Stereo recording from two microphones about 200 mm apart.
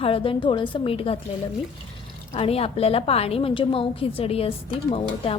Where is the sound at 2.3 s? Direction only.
30° left (ahead or behind).